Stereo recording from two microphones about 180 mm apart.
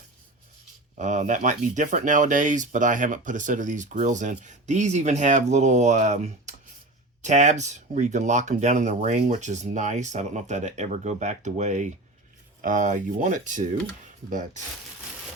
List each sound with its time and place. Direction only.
0.9 s speech: 40° right (ahead or behind)